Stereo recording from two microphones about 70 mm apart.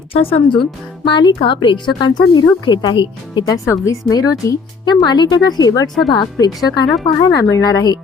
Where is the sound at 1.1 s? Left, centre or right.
Left.